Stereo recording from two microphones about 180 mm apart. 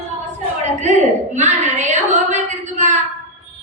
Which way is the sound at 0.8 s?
40° right (ahead or behind).